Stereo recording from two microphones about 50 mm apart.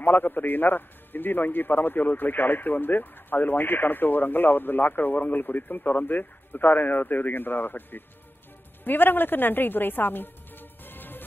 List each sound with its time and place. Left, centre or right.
0.0 s a man's voice: left